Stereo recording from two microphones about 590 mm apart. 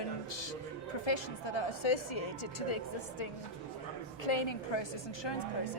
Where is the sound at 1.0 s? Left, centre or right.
Left.